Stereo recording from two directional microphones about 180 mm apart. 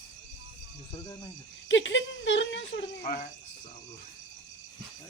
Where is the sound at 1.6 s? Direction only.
85° left.